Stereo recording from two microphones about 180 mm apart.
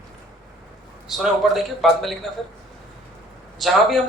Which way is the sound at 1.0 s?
Centre (ahead or behind).